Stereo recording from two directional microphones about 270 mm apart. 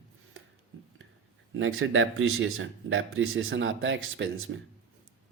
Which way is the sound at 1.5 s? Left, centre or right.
Right.